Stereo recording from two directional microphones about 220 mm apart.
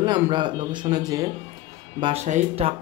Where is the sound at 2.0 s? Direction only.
30° right (ahead or behind).